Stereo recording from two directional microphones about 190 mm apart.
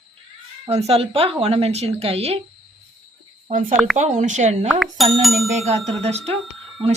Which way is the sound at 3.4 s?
40° right (ahead or behind).